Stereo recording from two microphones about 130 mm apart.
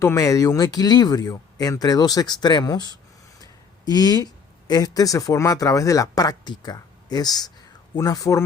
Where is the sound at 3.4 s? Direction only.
30° left (ahead or behind).